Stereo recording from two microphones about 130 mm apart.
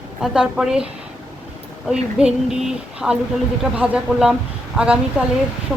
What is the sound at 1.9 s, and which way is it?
A woman's voice, 5° right (ahead or behind).